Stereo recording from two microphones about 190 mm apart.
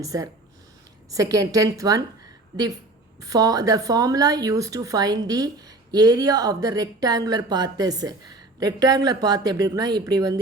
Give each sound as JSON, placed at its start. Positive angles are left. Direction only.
{"t": 0.0, "sound": "a woman's voice", "side_deg": -15}
{"t": 3.2, "sound": "a woman's voice", "side_deg": -20}